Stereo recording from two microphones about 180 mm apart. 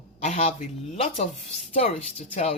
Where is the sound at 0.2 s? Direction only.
40° left (ahead or behind).